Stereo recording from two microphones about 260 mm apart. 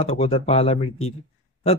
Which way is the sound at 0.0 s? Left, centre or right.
Left.